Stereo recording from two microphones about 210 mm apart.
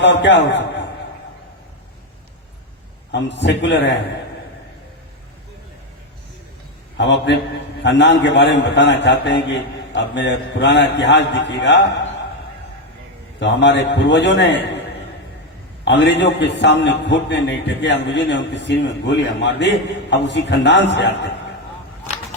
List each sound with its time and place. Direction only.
0.0 s a man's voice: 55° left (ahead or behind)
3.1 s a man's voice: 55° left (ahead or behind)
6.9 s a man's voice: 55° left (ahead or behind)
13.4 s a man's voice: 55° left (ahead or behind)
15.8 s a man's voice: 55° left (ahead or behind)